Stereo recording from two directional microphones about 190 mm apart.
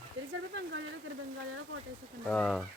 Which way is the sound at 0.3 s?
65° right (ahead or behind).